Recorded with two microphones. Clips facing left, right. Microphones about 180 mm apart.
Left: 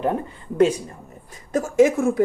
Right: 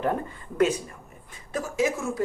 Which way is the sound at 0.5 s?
30° left (ahead or behind).